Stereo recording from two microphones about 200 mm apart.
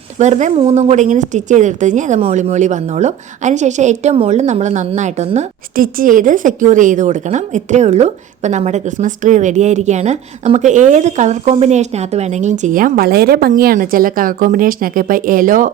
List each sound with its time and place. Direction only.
0.2 s a woman's voice: 35° right (ahead or behind)